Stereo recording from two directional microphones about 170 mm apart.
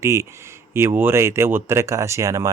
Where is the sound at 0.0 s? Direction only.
15° right (ahead or behind).